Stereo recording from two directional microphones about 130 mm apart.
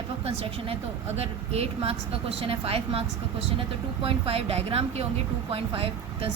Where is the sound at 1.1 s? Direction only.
50° right (ahead or behind).